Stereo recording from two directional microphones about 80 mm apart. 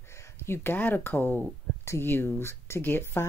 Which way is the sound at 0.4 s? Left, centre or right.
Left.